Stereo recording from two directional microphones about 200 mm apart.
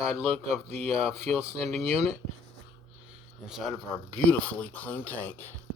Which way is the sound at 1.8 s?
30° right (ahead or behind).